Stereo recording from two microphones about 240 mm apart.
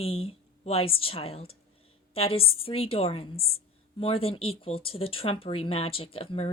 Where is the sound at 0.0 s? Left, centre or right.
Left.